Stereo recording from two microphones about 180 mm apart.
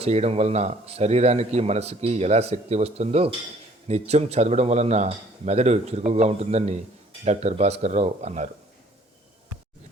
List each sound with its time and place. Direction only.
0.0 s speech: 35° right (ahead or behind)